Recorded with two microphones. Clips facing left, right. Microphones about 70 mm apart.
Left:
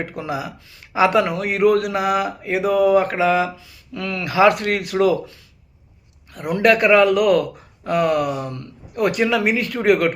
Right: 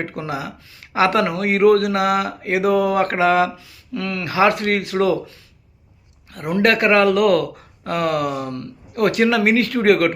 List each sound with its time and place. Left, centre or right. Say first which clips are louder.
0.2 s speech: even; right
2.5 s speech: right 2 dB; centre
3.0 s mantra: right 2 dB; right
3.9 s speech: left 1 dB; right
6.5 s speech: left 1 dB; right